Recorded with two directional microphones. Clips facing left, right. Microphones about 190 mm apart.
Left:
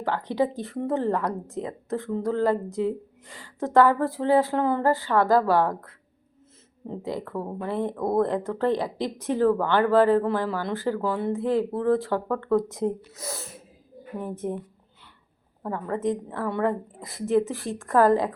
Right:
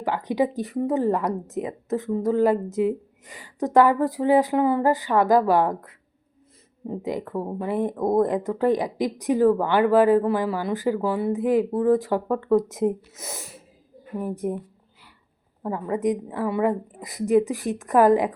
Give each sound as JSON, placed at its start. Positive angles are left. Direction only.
{"t": 0.0, "sound": "a woman's voice", "side_deg": -15}
{"t": 14.2, "sound": "speech", "side_deg": -10}
{"t": 15.6, "sound": "speech", "side_deg": -15}